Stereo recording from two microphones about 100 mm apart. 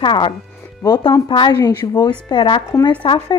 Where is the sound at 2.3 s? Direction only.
55° left (ahead or behind).